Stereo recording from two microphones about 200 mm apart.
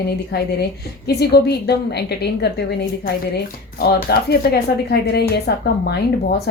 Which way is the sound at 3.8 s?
55° left (ahead or behind).